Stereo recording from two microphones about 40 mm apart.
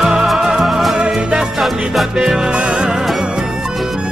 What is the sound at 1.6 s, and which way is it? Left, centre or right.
Music, centre.